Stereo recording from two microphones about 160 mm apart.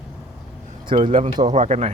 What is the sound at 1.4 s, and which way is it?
Speech, 45° right (ahead or behind).